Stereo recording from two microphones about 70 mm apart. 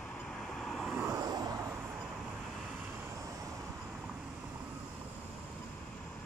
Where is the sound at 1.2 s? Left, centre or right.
Right.